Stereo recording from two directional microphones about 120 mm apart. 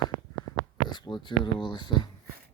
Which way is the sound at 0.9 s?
40° left (ahead or behind).